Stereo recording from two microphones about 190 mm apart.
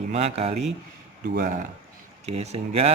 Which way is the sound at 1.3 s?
50° right (ahead or behind).